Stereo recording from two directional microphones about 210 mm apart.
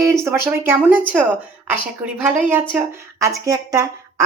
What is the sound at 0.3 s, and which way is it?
A woman's voice, 10° right (ahead or behind).